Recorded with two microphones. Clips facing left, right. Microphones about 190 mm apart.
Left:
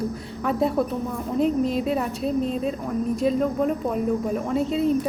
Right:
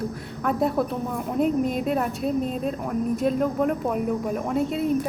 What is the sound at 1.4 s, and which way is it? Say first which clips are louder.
Speech: left 1 dB; 55° right (ahead or behind).